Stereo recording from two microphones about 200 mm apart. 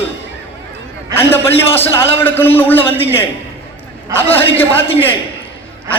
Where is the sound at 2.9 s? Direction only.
30° left (ahead or behind).